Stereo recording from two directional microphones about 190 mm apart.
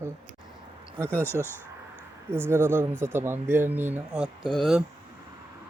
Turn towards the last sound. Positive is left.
turn(degrees=0)  # may be behind; listen again after turning